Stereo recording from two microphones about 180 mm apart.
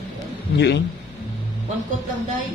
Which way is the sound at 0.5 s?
70° left (ahead or behind).